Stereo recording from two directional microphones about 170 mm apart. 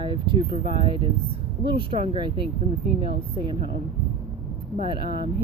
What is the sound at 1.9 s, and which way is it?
Speech, 30° right (ahead or behind).